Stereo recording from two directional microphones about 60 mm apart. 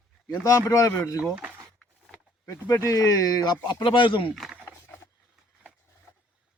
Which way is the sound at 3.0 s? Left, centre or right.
Left.